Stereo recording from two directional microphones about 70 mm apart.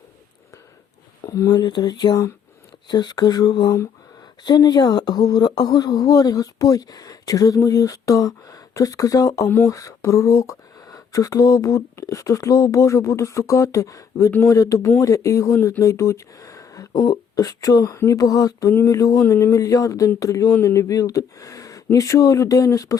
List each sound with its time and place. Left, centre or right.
1.2 s a sound: left
1.5 s speech: left
17.9 s speech: left
18.2 s speech: left
19.2 s speech: left
19.5 s speech: left